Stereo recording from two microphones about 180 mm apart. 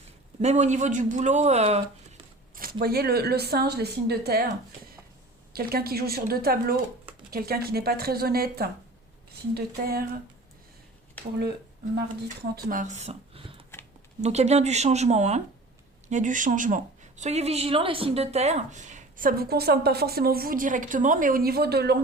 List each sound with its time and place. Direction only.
0.4 s speech: 40° right (ahead or behind)
2.6 s a woman's voice: 55° right (ahead or behind)
5.5 s a woman's voice: 60° right (ahead or behind)
12.4 s speech: 55° right (ahead or behind)